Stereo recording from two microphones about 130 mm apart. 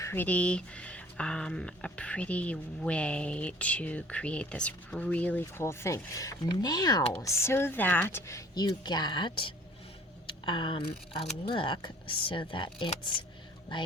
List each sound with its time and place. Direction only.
0.0 s speech: 15° left (ahead or behind); by 12.9 s 40° left (ahead or behind)